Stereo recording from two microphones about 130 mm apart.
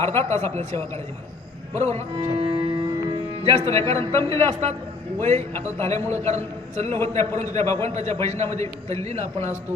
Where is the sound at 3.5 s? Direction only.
25° left (ahead or behind).